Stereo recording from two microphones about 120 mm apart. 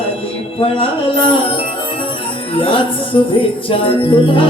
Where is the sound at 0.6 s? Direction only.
50° left (ahead or behind).